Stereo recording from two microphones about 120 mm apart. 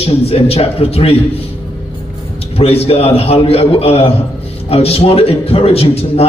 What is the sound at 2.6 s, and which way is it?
A man's voice, 55° left (ahead or behind).